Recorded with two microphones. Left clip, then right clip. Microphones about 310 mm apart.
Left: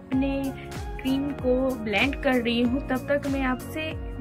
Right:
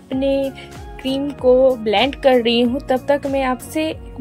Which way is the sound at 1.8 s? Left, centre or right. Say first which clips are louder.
Right 9 dB; centre.